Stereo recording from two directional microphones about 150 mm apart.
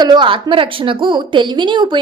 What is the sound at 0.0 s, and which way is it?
A woman's voice, 30° right (ahead or behind).